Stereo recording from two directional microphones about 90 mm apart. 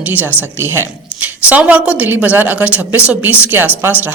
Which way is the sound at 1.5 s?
15° right (ahead or behind).